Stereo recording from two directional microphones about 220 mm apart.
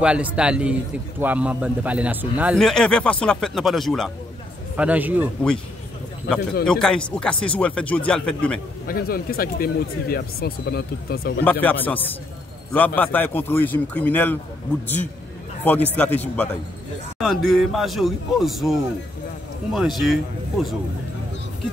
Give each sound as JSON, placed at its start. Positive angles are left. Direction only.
{"t": 0.0, "sound": "a man's voice", "side_deg": -5}
{"t": 6.6, "sound": "a man's voice", "side_deg": 5}
{"t": 8.8, "sound": "speech", "side_deg": 40}
{"t": 11.6, "sound": "speech", "side_deg": 10}
{"t": 15.6, "sound": "a man's voice", "side_deg": 10}